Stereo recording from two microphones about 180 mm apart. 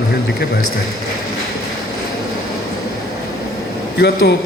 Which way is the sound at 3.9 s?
65° left (ahead or behind).